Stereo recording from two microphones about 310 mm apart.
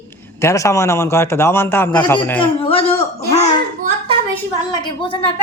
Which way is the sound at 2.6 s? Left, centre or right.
Centre.